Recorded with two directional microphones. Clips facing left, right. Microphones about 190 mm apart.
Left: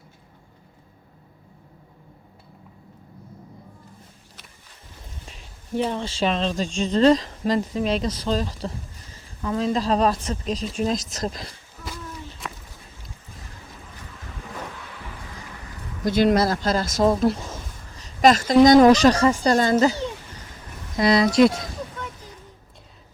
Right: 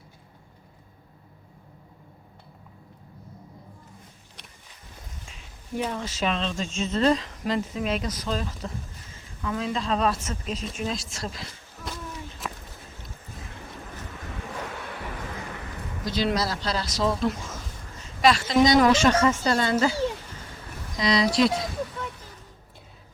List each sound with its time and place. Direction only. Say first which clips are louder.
5.3 s speech: left 5 dB; 30° left (ahead or behind)
6.7 s speech: left 4 dB; centre (ahead or behind)
6.9 s speech: left 6 dB; 35° left (ahead or behind)
11.9 s a sound: left 1 dB; centre (ahead or behind)
16.0 s speech: left 7 dB; 50° left (ahead or behind)
20.9 s speech: left 5 dB; 50° left (ahead or behind)